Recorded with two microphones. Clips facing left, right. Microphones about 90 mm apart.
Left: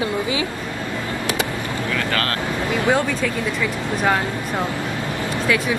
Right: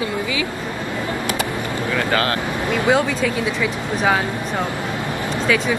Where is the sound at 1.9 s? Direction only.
20° right (ahead or behind).